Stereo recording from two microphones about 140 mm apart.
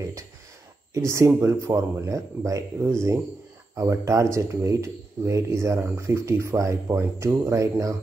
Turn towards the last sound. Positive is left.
turn(degrees=-25)  # may be behind; listen again after turning